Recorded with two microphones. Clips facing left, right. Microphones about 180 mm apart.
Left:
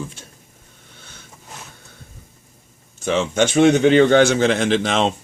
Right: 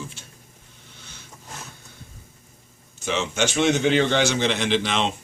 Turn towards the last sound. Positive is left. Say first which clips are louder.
# left 5 dB
turn(degrees=45)  # may be behind; listen again after turning